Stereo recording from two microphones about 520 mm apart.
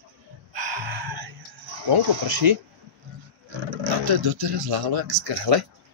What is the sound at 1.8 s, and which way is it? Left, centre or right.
Speech, right.